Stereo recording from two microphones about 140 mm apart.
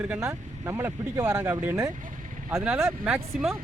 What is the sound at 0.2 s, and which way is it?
Speech, 20° right (ahead or behind).